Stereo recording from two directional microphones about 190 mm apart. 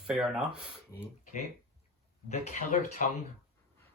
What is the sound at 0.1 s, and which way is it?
Speech, 5° right (ahead or behind).